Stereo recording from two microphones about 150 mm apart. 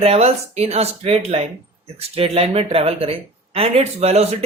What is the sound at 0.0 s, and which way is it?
Speech, 45° right (ahead or behind).